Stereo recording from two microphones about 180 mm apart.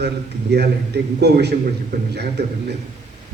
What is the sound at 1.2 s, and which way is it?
Speech, 70° right (ahead or behind).